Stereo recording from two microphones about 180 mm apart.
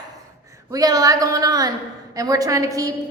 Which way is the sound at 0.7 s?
20° right (ahead or behind).